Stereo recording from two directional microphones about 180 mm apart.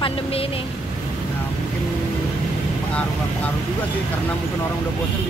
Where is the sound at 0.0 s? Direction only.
30° left (ahead or behind).